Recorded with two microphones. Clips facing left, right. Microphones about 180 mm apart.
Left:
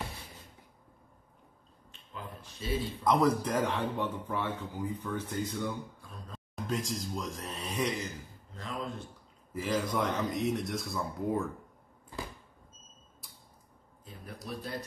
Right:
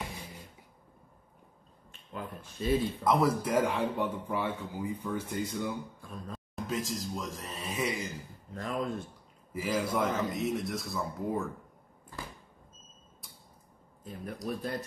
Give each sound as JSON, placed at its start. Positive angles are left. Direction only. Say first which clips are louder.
{"t": 2.8, "sound": "a man's voice", "louder": "left 4 dB", "side_deg": 0}
{"t": 6.0, "sound": "speech", "louder": "right 6 dB", "side_deg": -50}
{"t": 6.5, "sound": "speech", "louder": "even", "side_deg": 0}
{"t": 8.5, "sound": "speech", "louder": "right 5 dB", "side_deg": -50}
{"t": 9.5, "sound": "speech", "louder": "right 1 dB", "side_deg": -10}
{"t": 13.2, "sound": "a sound", "louder": "right 2 dB", "side_deg": 0}
{"t": 14.0, "sound": "speech", "louder": "right 7 dB", "side_deg": -50}